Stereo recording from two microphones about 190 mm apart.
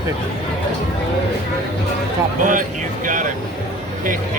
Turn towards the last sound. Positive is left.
turn(degrees=-45)  # may be behind; listen again after turning